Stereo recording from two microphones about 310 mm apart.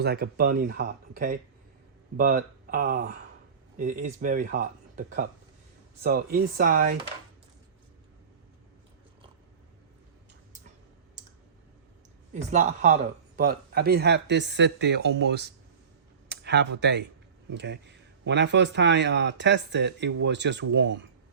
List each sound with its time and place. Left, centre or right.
0.0 s speech: right
12.3 s speech: right